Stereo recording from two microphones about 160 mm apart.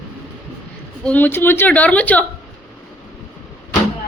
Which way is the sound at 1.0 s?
10° left (ahead or behind).